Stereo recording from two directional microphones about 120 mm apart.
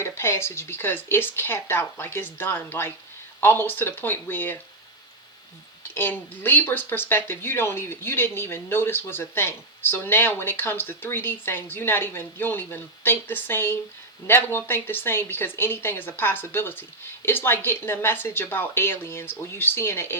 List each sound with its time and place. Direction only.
0.0 s a woman's voice: 20° left (ahead or behind)
5.9 s a woman's voice: 20° left (ahead or behind)